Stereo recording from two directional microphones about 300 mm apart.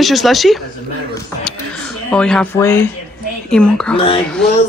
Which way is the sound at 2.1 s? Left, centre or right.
Centre.